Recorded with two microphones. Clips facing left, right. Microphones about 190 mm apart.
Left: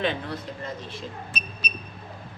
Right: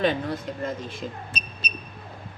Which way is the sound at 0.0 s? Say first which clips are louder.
Right 4 dB; 45° right (ahead or behind).